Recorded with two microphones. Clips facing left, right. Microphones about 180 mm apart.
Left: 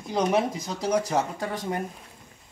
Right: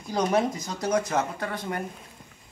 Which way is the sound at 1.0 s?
35° left (ahead or behind).